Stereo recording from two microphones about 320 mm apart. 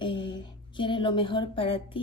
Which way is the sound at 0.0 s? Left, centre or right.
Centre.